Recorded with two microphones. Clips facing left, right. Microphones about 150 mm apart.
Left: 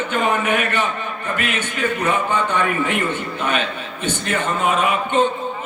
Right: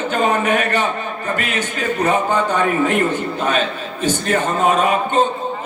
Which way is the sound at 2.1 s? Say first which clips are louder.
Right 5 dB; 40° right (ahead or behind).